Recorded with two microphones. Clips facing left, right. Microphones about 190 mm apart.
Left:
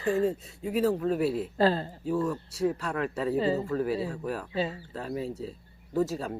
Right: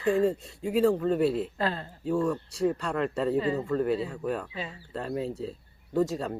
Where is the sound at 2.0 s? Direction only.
5° left (ahead or behind).